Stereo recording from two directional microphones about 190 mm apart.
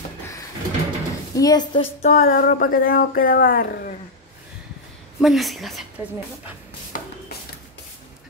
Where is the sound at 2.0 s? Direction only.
40° left (ahead or behind).